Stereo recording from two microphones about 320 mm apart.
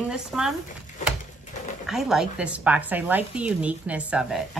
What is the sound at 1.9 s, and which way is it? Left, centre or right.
Speech, centre.